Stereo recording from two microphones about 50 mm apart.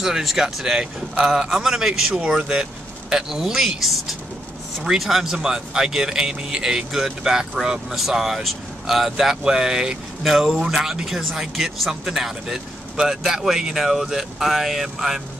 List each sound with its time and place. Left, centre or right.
0.0 s speech: centre